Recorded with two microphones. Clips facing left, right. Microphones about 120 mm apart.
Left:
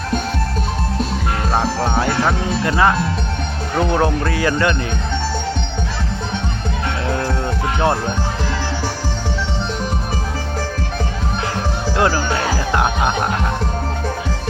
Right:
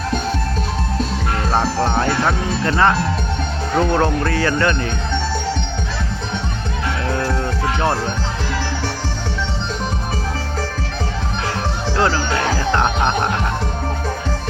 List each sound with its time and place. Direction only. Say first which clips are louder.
1.5 s speech: right 1 dB; 5° left (ahead or behind)
7.8 s speech: left 3 dB; 15° left (ahead or behind)
11.9 s speech: left 1 dB; 20° left (ahead or behind)
12.7 s speech: left 1 dB; 10° left (ahead or behind)